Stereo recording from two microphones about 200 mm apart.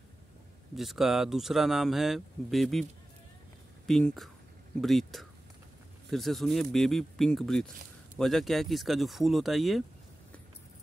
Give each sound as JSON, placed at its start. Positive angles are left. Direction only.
{"t": 0.7, "sound": "speech", "side_deg": 0}